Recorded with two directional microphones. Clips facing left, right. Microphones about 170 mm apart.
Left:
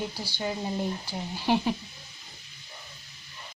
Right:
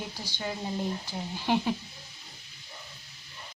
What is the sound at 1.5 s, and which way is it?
Speech, 10° left (ahead or behind).